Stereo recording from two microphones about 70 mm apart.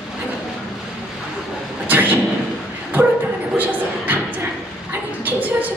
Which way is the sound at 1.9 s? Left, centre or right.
Right.